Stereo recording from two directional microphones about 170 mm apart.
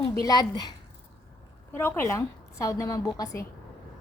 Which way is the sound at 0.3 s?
25° left (ahead or behind).